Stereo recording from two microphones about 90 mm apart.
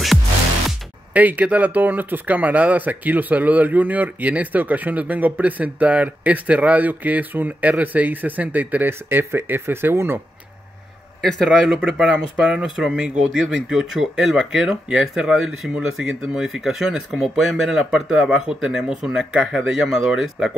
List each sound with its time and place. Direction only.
1.1 s speech: 15° right (ahead or behind)
11.1 s speech: 5° left (ahead or behind)